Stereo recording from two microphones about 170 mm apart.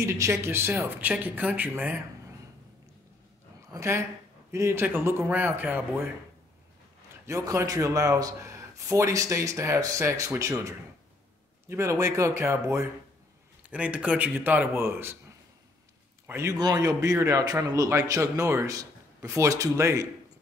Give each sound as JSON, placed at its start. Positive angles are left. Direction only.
{"t": 0.0, "sound": "speech", "side_deg": -15}
{"t": 3.7, "sound": "speech", "side_deg": -15}
{"t": 7.2, "sound": "speech", "side_deg": -20}
{"t": 11.7, "sound": "speech", "side_deg": -15}
{"t": 16.3, "sound": "speech", "side_deg": -20}